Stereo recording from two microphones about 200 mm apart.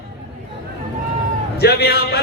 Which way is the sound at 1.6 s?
55° left (ahead or behind).